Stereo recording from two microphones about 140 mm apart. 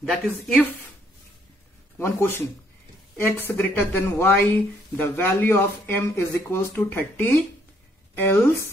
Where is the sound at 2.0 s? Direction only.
20° left (ahead or behind).